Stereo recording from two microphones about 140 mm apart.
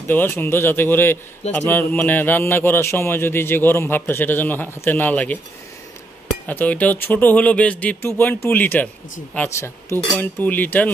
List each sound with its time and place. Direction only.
0.0 s a man's voice: 15° left (ahead or behind)
6.4 s a man's voice: 10° left (ahead or behind)